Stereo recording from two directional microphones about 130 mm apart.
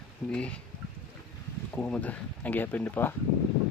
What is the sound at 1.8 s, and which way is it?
Speech, 10° left (ahead or behind).